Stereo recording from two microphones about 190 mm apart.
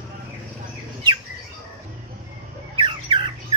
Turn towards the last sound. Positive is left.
turn(degrees=-25)  # may be behind; listen again after turning